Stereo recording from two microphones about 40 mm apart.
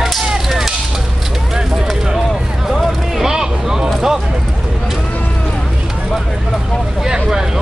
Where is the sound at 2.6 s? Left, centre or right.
Centre.